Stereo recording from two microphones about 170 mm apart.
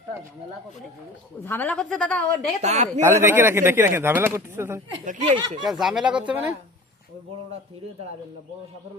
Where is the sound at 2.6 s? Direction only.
40° right (ahead or behind).